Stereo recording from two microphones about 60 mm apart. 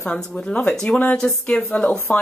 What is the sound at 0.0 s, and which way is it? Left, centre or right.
Speech, centre.